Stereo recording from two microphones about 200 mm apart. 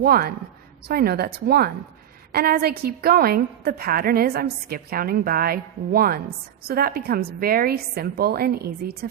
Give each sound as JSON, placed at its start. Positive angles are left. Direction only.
{"t": 0.0, "sound": "a woman's voice", "side_deg": -50}